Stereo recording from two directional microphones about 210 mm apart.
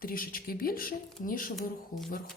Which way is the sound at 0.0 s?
45° left (ahead or behind).